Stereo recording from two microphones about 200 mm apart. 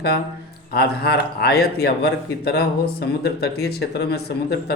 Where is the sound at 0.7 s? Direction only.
50° left (ahead or behind).